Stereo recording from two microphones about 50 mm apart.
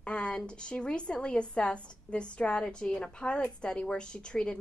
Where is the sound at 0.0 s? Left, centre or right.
Left.